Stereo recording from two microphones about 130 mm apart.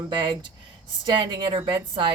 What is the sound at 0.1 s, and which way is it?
A woman's voice, 40° right (ahead or behind).